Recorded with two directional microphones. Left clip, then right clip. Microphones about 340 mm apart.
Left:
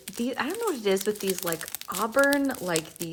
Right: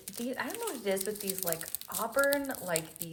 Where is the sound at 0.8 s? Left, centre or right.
Centre.